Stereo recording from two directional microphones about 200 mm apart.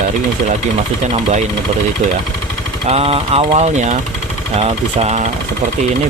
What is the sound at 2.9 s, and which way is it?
Speech, 30° right (ahead or behind).